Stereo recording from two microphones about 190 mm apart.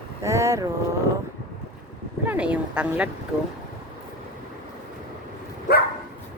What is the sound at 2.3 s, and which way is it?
Speech, 5° right (ahead or behind).